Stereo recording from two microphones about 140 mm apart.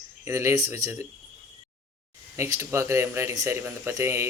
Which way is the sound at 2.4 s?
20° right (ahead or behind).